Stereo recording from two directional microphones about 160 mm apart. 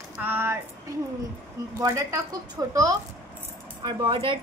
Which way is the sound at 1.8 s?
20° right (ahead or behind).